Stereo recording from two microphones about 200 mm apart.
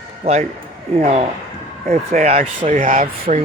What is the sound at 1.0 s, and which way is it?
Speech, 30° right (ahead or behind).